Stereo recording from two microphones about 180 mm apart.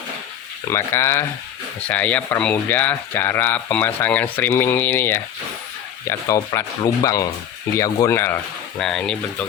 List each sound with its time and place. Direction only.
0.7 s speech: 15° left (ahead or behind)